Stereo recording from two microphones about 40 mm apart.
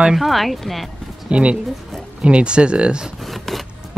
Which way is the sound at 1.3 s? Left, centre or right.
Right.